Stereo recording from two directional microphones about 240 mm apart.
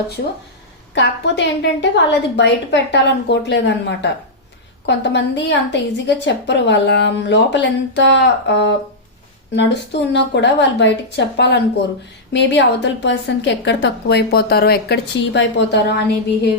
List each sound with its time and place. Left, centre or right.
0.9 s a woman's voice: left